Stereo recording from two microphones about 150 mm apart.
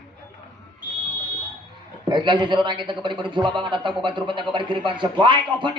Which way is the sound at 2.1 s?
30° right (ahead or behind).